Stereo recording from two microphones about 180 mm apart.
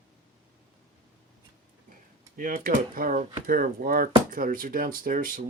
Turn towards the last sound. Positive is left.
turn(degrees=-50)  # may be behind; listen again after turning